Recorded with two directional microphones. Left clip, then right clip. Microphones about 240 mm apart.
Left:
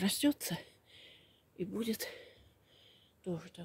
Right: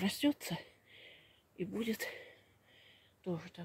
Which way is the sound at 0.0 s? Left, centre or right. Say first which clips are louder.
Left 2 dB; centre.